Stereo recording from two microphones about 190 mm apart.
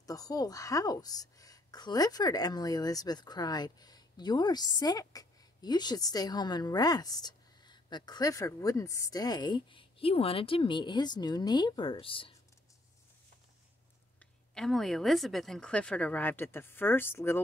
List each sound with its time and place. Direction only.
0.0 s speech: 20° left (ahead or behind)
14.5 s speech: centre (ahead or behind)